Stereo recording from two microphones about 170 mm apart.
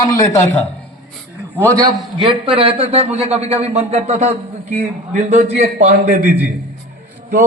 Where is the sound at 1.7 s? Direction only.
20° right (ahead or behind); by 4.2 s 40° right (ahead or behind).